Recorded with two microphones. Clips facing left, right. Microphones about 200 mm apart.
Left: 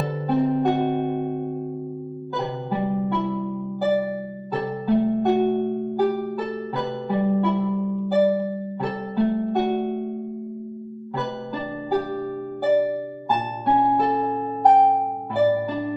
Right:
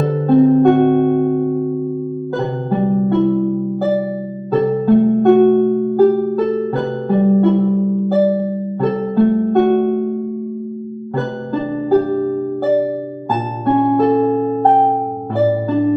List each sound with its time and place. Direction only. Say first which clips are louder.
0.0 s music: right 10 dB; 55° right (ahead or behind)
2.3 s harp: right 6 dB; 55° right (ahead or behind)
4.5 s music: right 10 dB; 55° right (ahead or behind)
11.1 s music: right 8 dB; 55° right (ahead or behind)